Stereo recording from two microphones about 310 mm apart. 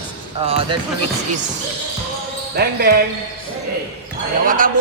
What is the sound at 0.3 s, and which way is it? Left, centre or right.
Speech, centre.